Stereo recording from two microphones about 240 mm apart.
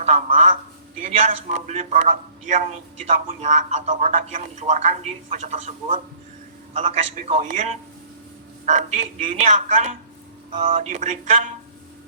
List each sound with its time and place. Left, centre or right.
0.0 s a man's voice: right